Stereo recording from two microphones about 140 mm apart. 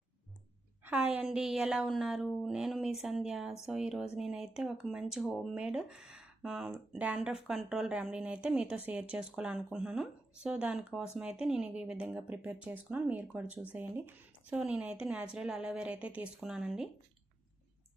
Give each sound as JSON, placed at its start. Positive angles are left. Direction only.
{"t": 0.9, "sound": "a woman's voice", "side_deg": -10}